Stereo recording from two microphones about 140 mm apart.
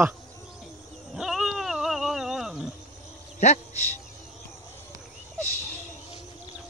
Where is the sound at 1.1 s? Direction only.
5° right (ahead or behind).